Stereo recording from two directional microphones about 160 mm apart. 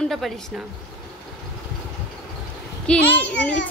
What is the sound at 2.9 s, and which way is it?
Speech, 10° left (ahead or behind).